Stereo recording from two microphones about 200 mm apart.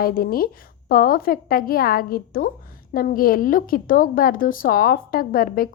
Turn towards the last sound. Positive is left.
turn(degrees=45)  # may be behind; listen again after turning